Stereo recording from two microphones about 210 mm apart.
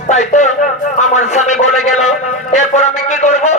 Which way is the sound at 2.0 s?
35° left (ahead or behind).